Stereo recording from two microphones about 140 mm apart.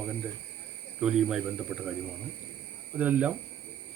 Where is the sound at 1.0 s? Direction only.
5° right (ahead or behind).